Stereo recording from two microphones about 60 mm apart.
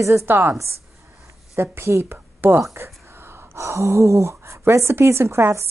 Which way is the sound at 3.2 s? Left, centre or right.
Right.